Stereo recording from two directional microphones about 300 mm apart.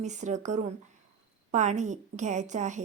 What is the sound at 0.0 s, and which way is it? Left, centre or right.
A woman's voice, right.